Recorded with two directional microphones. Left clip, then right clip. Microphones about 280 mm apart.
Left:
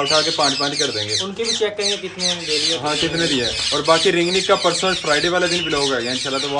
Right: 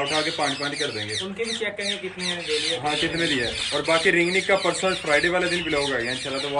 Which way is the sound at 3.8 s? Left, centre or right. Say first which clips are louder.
Left 4 dB; centre.